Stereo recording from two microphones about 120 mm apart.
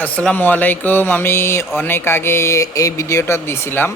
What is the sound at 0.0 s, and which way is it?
Speech, 10° left (ahead or behind).